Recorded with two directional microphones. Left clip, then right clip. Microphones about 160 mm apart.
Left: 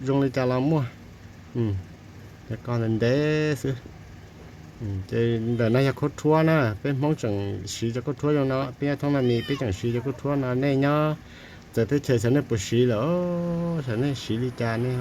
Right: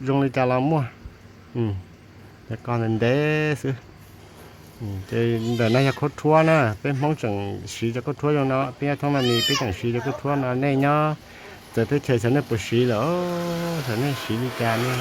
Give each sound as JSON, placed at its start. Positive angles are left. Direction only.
{"t": 0.0, "sound": "speech", "side_deg": -40}
{"t": 2.5, "sound": "speech", "side_deg": -40}
{"t": 5.0, "sound": "speech", "side_deg": -40}
{"t": 9.2, "sound": "speech", "side_deg": -70}
{"t": 9.6, "sound": "speech", "side_deg": -40}